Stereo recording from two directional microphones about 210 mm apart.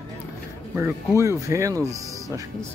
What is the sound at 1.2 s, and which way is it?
Speech, 15° right (ahead or behind).